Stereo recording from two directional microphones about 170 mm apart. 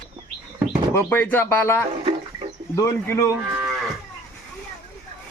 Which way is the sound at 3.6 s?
Centre (ahead or behind).